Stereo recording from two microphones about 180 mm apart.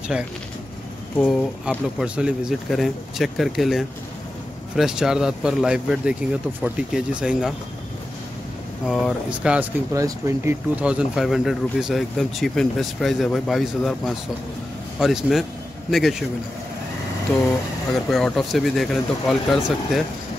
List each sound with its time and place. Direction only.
1.1 s speech: 5° left (ahead or behind)
8.8 s speech: centre (ahead or behind)
9.9 s speech: 15° right (ahead or behind); by 16.3 s centre (ahead or behind)
17.9 s speech: centre (ahead or behind)